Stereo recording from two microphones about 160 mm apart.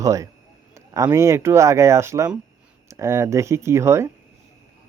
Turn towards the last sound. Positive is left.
turn(degrees=-15)  # may be behind; listen again after turning